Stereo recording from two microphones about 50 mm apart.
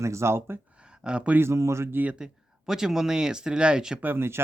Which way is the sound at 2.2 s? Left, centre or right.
Centre.